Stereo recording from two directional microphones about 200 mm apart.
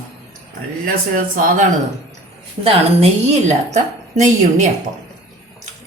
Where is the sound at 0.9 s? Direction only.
45° right (ahead or behind).